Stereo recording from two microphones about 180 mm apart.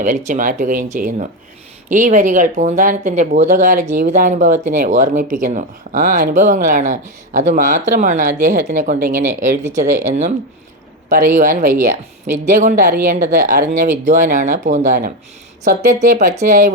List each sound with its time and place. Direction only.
0.3 s speech: 45° right (ahead or behind)
11.3 s a woman's voice: 45° right (ahead or behind)